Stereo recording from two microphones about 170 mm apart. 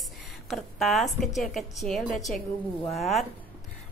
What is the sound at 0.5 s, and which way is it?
A woman's voice, centre (ahead or behind).